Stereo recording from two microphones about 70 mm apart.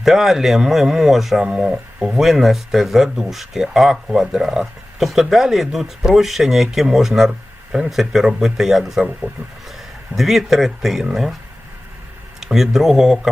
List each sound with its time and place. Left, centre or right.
0.0 s speech: centre
1.5 s speech: centre
1.7 s speech: centre
10.2 s speech: centre
12.4 s speech: centre